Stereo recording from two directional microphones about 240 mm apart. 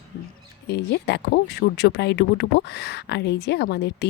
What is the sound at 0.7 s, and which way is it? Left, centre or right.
Speech, left.